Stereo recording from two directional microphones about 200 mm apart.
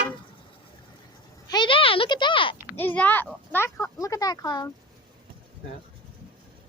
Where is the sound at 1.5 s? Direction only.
25° left (ahead or behind).